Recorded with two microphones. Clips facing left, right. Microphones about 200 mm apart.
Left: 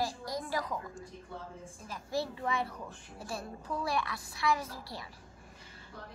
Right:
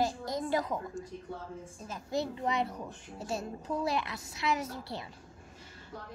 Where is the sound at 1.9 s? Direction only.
20° right (ahead or behind).